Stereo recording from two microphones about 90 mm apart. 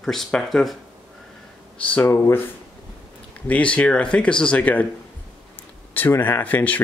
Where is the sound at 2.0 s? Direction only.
30° left (ahead or behind).